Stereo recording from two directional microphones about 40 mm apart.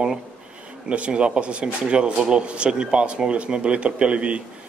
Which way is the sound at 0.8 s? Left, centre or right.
Right.